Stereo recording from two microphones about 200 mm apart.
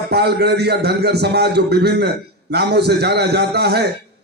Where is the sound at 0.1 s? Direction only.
55° right (ahead or behind).